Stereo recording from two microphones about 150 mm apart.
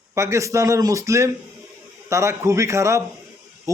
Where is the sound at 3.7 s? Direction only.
20° right (ahead or behind).